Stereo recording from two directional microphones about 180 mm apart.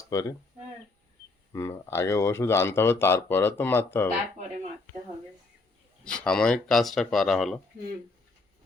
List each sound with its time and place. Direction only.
0.0 s speech: 20° left (ahead or behind)
1.5 s speech: 15° left (ahead or behind)
6.1 s speech: 5° left (ahead or behind)